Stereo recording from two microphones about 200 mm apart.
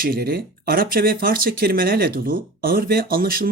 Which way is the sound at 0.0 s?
45° right (ahead or behind).